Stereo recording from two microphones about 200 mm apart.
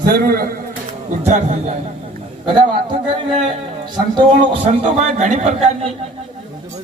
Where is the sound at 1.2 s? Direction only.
35° right (ahead or behind).